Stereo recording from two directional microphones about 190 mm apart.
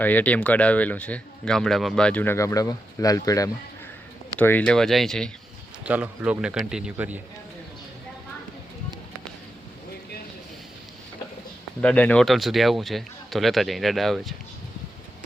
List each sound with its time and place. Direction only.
0.0 s a man's voice: 10° left (ahead or behind); by 7.2 s 10° right (ahead or behind)
11.8 s a man's voice: 5° left (ahead or behind)